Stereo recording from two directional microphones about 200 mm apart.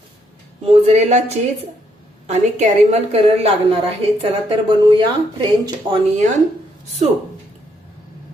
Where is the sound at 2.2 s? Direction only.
35° right (ahead or behind).